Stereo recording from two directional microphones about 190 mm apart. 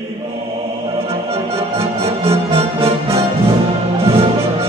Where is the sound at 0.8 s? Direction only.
30° right (ahead or behind).